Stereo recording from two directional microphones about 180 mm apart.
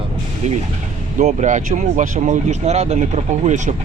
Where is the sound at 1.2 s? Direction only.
40° right (ahead or behind).